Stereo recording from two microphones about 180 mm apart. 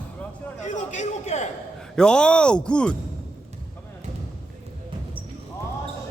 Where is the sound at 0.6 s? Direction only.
40° left (ahead or behind).